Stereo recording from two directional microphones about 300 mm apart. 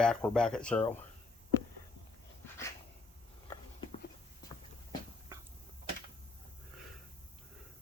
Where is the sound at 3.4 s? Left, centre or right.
Centre.